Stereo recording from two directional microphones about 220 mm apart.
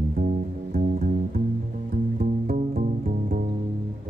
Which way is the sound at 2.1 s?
40° right (ahead or behind).